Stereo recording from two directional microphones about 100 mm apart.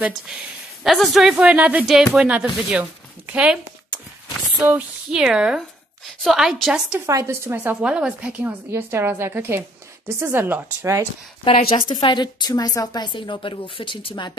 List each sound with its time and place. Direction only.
0.8 s speech: centre (ahead or behind)
3.3 s a sound: 10° right (ahead or behind)
5.1 s speech: 10° right (ahead or behind)
7.1 s speech: 30° right (ahead or behind)
7.5 s speech: 10° right (ahead or behind)
11.4 s speech: 70° left (ahead or behind)
11.9 s a woman's voice: 45° left (ahead or behind)